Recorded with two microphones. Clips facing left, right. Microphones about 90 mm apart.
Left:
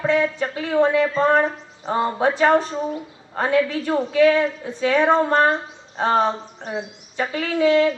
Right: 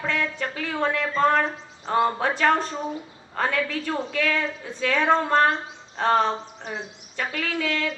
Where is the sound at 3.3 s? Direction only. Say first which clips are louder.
Left 6 dB; 15° left (ahead or behind).